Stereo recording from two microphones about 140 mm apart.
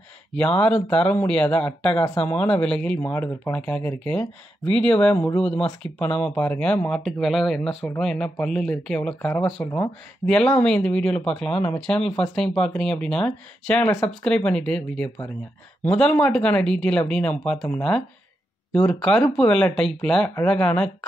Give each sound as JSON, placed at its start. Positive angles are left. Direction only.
{"t": 0.8, "sound": "speech", "side_deg": 10}
{"t": 9.6, "sound": "speech", "side_deg": 15}
{"t": 10.2, "sound": "speech", "side_deg": 5}